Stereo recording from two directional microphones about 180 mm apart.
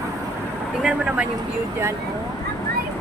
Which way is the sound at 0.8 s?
5° right (ahead or behind).